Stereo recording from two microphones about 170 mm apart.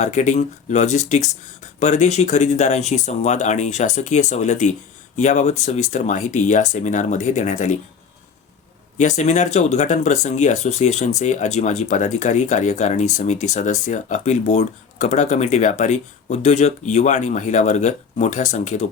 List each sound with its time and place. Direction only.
0.0 s speech: 45° left (ahead or behind)
9.0 s speech: 45° left (ahead or behind)